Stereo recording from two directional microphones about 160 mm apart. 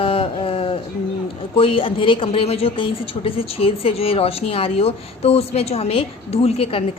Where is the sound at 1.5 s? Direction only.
35° left (ahead or behind).